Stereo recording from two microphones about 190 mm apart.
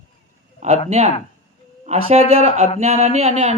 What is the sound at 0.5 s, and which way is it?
Speech, 35° right (ahead or behind).